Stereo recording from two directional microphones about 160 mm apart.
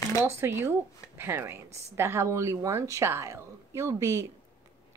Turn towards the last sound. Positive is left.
turn(degrees=-20)  # may be behind; listen again after turning